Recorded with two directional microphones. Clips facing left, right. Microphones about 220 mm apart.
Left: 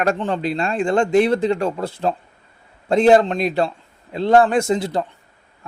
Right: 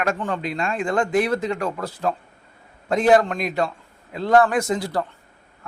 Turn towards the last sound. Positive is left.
turn(degrees=25)  # may be behind; listen again after turning